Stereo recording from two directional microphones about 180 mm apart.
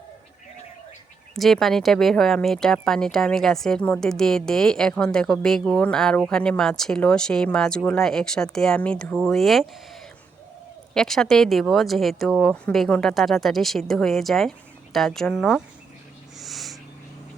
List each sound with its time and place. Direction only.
1.4 s speech: centre (ahead or behind)
16.4 s owl: centre (ahead or behind)